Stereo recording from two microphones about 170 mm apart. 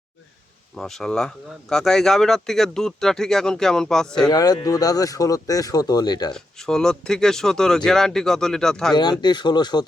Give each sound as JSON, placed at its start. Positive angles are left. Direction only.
{"t": 0.8, "sound": "speech", "side_deg": 0}
{"t": 4.3, "sound": "speech", "side_deg": 20}
{"t": 6.3, "sound": "speech", "side_deg": 5}
{"t": 9.2, "sound": "speech", "side_deg": 25}